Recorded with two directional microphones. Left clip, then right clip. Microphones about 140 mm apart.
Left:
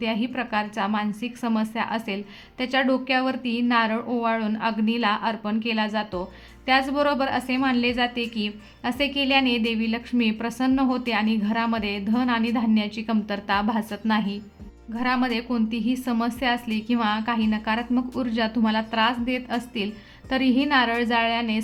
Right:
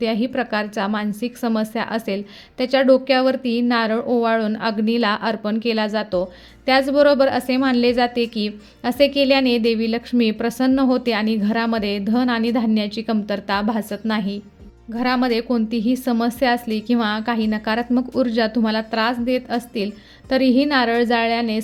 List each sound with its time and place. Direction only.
0.0 s a woman's voice: 40° right (ahead or behind)